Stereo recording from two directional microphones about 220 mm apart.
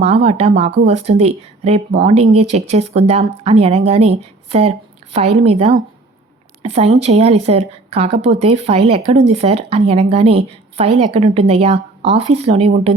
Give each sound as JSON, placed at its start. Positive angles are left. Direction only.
{"t": 0.0, "sound": "a woman's voice", "side_deg": -30}